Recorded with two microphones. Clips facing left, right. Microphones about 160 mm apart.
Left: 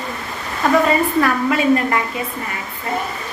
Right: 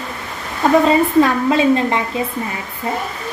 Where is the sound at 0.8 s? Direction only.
20° right (ahead or behind).